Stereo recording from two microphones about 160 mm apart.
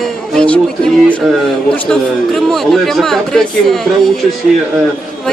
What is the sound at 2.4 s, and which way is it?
Speech, centre (ahead or behind).